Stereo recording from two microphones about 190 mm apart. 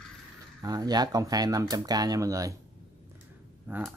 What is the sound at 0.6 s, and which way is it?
Speech, 20° right (ahead or behind).